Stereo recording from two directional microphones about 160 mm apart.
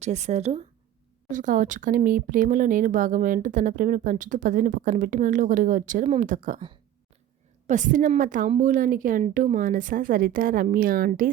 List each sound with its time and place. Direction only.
0.0 s speech: 45° right (ahead or behind)
1.3 s speech: 55° right (ahead or behind)
7.7 s speech: 50° right (ahead or behind)